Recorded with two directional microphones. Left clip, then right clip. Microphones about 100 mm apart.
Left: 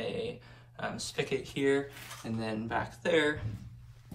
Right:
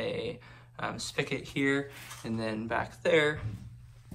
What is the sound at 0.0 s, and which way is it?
Speech, 25° left (ahead or behind).